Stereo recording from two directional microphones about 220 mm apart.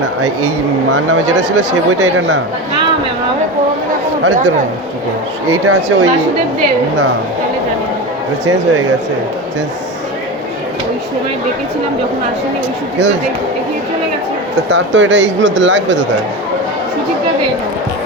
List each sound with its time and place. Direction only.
0.2 s speech: 90° right
2.0 s speech: 55° right (ahead or behind)
5.5 s speech: 90° right
14.7 s speech: 55° right (ahead or behind)